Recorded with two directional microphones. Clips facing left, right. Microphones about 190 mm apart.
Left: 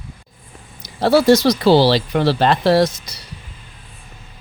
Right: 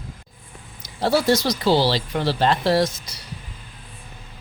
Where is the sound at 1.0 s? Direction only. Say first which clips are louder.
Left 7 dB; 80° left.